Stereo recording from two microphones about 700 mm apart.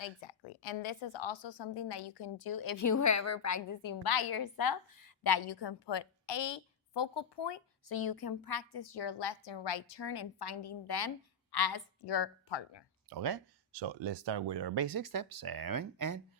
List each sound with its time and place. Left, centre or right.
0.0 s a woman's voice: left
13.1 s speech: right